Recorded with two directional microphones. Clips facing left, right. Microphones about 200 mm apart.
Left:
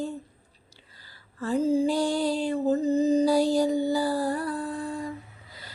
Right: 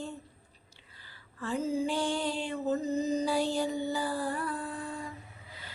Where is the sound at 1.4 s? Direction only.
35° left (ahead or behind).